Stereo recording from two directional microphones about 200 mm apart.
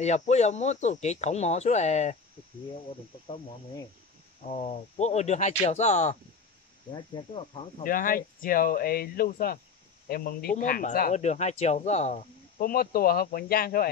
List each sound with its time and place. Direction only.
0.0 s speech: 35° left (ahead or behind)
4.4 s speech: 35° left (ahead or behind)
7.8 s speech: 45° left (ahead or behind)